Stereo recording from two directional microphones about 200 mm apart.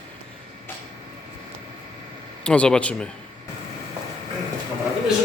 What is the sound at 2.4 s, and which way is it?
Speech, 5° left (ahead or behind).